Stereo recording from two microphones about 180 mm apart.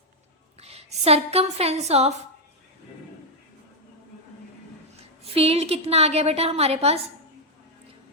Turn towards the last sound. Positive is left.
turn(degrees=-35)  # may be behind; listen again after turning